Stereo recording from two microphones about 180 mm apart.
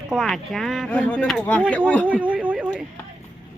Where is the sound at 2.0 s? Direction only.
5° right (ahead or behind).